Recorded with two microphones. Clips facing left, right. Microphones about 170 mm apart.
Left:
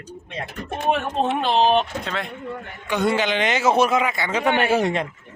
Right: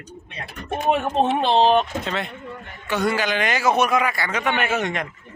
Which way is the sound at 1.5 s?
35° right (ahead or behind).